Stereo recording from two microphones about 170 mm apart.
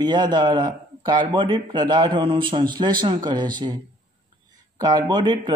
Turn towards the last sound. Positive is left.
turn(degrees=-25)  # may be behind; listen again after turning